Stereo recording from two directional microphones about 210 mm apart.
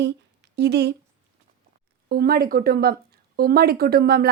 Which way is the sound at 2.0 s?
45° right (ahead or behind).